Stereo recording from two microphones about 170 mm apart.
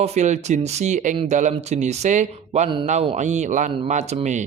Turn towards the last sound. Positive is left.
turn(degrees=-40)  # may be behind; listen again after turning